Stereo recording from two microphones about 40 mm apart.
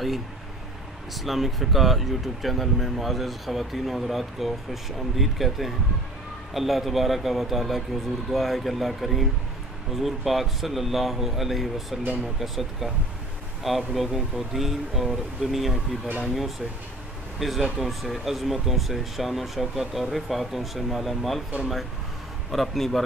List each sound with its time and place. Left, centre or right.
1.1 s speech: centre
22.5 s speech: centre